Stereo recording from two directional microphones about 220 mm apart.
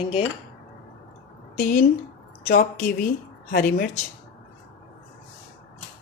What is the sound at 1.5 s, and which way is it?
Speech, 40° left (ahead or behind).